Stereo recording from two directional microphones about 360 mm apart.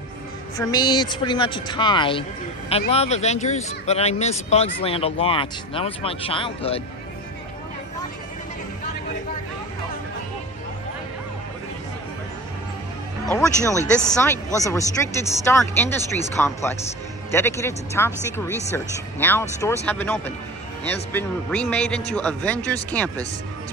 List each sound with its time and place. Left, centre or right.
0.6 s speech: centre
13.3 s a man's voice: centre